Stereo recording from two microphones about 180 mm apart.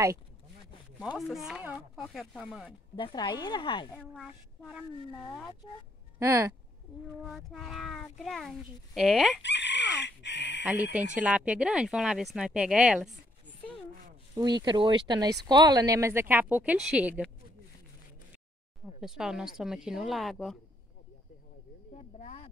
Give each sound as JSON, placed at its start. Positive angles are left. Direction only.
{"t": 1.1, "sound": "a child's voice", "side_deg": 0}
{"t": 3.0, "sound": "speech", "side_deg": 25}
{"t": 3.9, "sound": "a child's voice", "side_deg": 5}
{"t": 6.1, "sound": "speech", "side_deg": -15}
{"t": 7.2, "sound": "a child's voice", "side_deg": 0}
{"t": 9.4, "sound": "chicken", "side_deg": 75}
{"t": 10.7, "sound": "a woman's voice", "side_deg": -10}
{"t": 14.3, "sound": "a woman's voice", "side_deg": -25}
{"t": 18.9, "sound": "a child's voice", "side_deg": -5}
{"t": 21.9, "sound": "a sound", "side_deg": 35}